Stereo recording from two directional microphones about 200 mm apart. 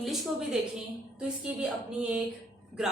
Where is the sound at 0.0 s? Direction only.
Centre (ahead or behind).